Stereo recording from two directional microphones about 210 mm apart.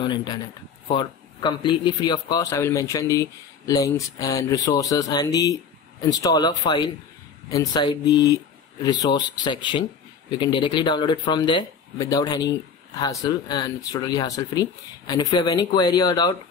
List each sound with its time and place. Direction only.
0.0 s a man's voice: 20° left (ahead or behind)